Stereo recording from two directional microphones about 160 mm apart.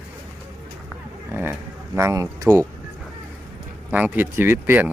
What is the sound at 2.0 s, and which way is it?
Speech, 20° right (ahead or behind).